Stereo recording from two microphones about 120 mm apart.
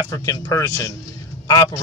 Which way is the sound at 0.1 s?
30° left (ahead or behind).